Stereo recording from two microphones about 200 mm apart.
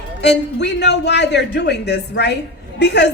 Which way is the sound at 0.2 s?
60° left (ahead or behind).